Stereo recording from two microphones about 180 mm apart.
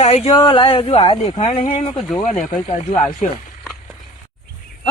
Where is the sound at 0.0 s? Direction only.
35° left (ahead or behind).